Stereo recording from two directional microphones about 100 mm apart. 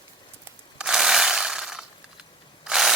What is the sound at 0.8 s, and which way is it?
Mechanisms, 5° right (ahead or behind).